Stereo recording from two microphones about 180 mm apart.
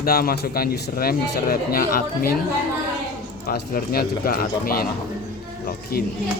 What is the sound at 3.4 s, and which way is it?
Speech, 55° left (ahead or behind).